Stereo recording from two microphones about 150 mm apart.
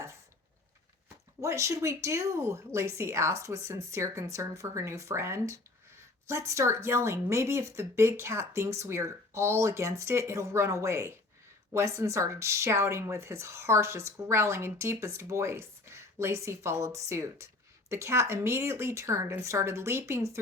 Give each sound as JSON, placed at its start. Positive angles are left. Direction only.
{"t": 1.4, "sound": "speech", "side_deg": -20}